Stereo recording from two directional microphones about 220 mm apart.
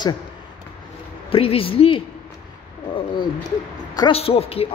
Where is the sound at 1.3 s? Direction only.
25° left (ahead or behind).